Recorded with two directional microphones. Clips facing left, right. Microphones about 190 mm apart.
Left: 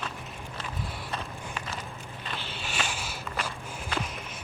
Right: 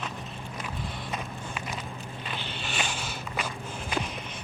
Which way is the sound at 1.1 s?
10° right (ahead or behind).